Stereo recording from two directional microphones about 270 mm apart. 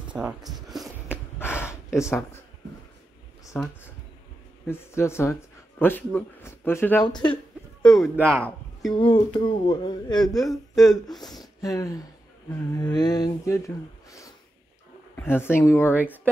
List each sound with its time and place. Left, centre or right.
0.1 s a sound: centre
3.4 s speech: centre
8.0 s speech: centre
8.9 s speech: centre
11.1 s speech: centre
11.3 s speech: centre
15.1 s speech: centre